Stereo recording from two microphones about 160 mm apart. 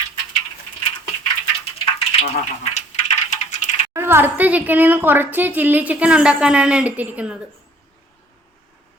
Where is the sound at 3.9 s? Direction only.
15° right (ahead or behind).